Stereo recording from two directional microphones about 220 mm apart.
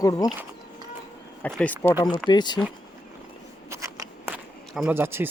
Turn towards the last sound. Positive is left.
turn(degrees=-10)  # may be behind; listen again after turning